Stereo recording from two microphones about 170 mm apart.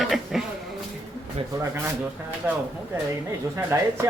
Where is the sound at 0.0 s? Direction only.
Centre (ahead or behind).